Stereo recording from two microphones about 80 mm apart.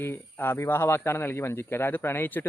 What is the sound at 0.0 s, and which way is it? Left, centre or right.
Speech, left.